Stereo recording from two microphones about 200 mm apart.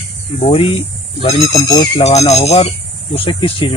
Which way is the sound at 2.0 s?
35° left (ahead or behind).